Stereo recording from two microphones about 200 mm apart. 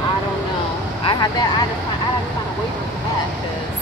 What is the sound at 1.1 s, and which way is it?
Speech, 20° left (ahead or behind).